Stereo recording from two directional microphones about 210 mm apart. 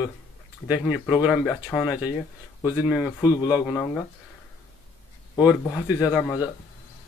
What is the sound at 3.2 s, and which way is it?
Speech, 20° left (ahead or behind).